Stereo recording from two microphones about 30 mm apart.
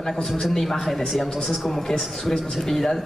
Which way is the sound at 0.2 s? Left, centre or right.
Centre.